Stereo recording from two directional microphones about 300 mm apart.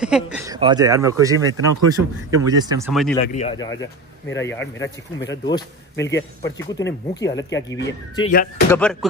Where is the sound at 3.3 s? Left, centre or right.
Left.